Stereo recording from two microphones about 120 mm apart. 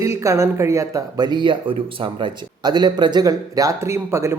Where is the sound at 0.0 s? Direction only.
25° right (ahead or behind).